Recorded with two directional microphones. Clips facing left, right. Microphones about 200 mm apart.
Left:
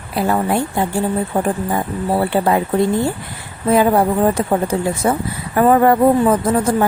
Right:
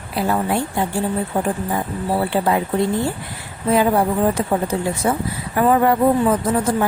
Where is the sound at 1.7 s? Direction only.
50° left (ahead or behind).